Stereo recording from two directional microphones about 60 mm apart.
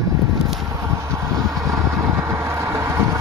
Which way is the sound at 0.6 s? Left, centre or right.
Right.